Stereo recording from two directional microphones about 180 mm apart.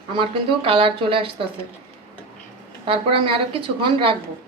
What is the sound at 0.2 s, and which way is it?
A woman's voice, 30° right (ahead or behind).